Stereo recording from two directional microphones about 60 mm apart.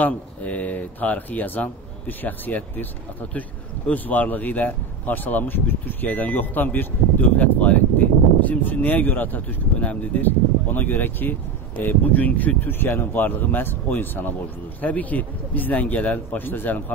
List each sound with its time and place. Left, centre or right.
0.0 s speech: left